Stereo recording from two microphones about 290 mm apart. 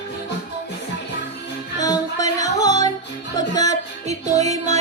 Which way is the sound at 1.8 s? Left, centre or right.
Centre.